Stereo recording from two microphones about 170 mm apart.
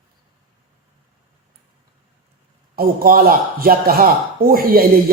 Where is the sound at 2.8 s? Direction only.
60° right (ahead or behind).